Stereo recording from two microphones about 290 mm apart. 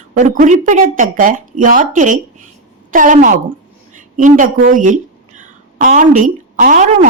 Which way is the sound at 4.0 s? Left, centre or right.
Right.